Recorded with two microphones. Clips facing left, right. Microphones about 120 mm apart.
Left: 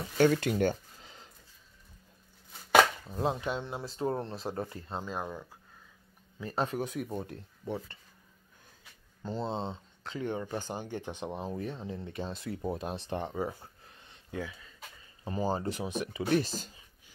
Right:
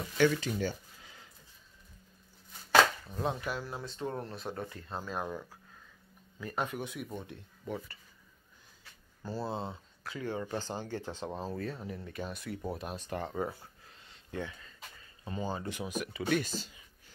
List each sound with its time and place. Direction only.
0.2 s speech: 45° left (ahead or behind)
1.0 s a sound: 30° left (ahead or behind)
3.2 s speech: 25° left (ahead or behind)
6.4 s speech: 30° left (ahead or behind)
7.6 s speech: 25° left (ahead or behind)
9.2 s speech: 20° left (ahead or behind)
13.6 s a sound: 20° left (ahead or behind)
14.3 s speech: 10° left (ahead or behind)
15.2 s speech: 30° left (ahead or behind)
16.3 s speech: 35° left (ahead or behind)